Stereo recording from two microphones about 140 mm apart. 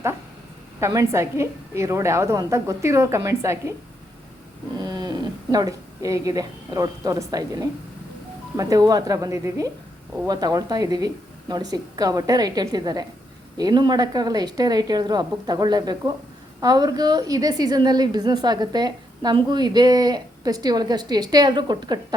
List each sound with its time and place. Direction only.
0.8 s a woman's voice: 20° right (ahead or behind)
4.8 s a woman's voice: 30° right (ahead or behind)